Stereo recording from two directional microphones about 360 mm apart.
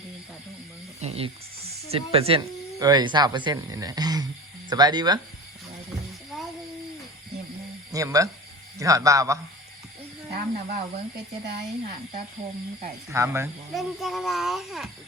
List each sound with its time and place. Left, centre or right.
1.0 s speech: centre
7.9 s speech: centre
10.3 s speech: centre
12.8 s speech: centre